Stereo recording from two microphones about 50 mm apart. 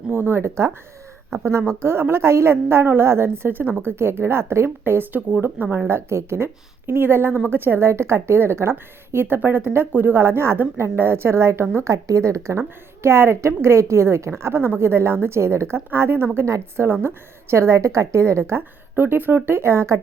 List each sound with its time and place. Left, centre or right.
0.1 s a woman's voice: right
1.8 s a woman's voice: right
4.8 s speech: right
5.9 s a woman's voice: right
10.2 s a woman's voice: right
11.9 s a woman's voice: right
18.9 s speech: right
19.5 s a woman's voice: right